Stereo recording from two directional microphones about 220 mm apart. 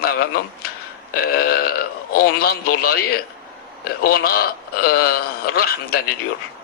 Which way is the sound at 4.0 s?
40° left (ahead or behind).